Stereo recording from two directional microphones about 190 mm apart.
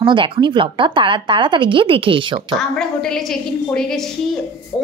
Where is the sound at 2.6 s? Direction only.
Centre (ahead or behind).